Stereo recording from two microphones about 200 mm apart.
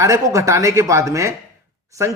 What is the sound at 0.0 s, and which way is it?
Speech, 15° right (ahead or behind).